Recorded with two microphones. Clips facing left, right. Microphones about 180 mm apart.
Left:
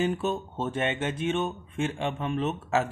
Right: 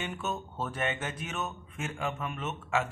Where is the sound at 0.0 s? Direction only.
30° left (ahead or behind).